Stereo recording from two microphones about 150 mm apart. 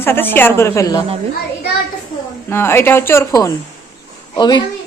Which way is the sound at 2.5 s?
15° left (ahead or behind).